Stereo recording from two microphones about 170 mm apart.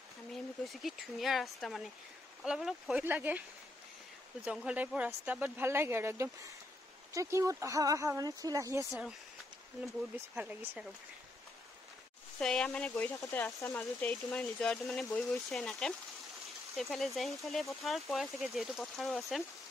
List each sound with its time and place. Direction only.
0.3 s speech: centre (ahead or behind)
4.5 s speech: 5° right (ahead or behind)
10.3 s speech: 10° right (ahead or behind)
12.4 s speech: 5° left (ahead or behind)